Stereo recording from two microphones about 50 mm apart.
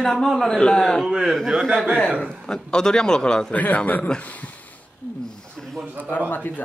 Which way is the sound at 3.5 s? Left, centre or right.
Left.